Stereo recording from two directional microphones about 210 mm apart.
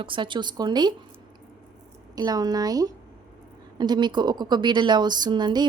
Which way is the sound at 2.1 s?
20° right (ahead or behind).